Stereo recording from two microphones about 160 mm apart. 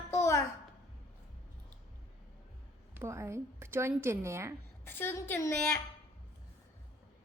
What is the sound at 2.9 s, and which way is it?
A woman's voice, 15° right (ahead or behind).